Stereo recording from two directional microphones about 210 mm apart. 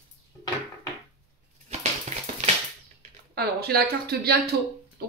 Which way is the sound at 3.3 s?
50° right (ahead or behind).